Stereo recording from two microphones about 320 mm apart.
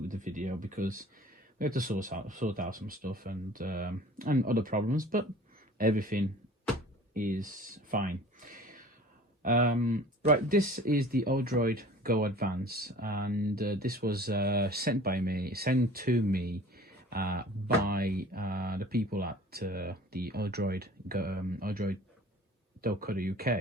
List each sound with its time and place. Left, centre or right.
0.1 s speech: right